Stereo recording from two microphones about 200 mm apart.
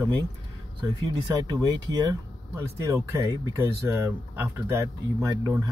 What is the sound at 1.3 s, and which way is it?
Speech, 20° right (ahead or behind).